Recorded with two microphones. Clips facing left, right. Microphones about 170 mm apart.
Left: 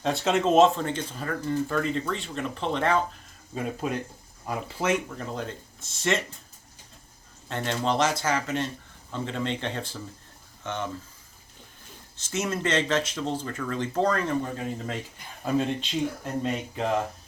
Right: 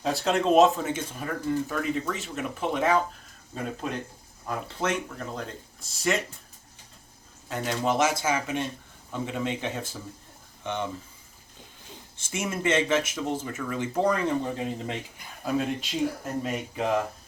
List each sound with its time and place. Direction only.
0.0 s speech: centre (ahead or behind)
3.5 s speech: 5° left (ahead or behind)
7.4 s speech: 5° right (ahead or behind)
12.3 s speech: 10° right (ahead or behind)
15.4 s speech: 5° right (ahead or behind)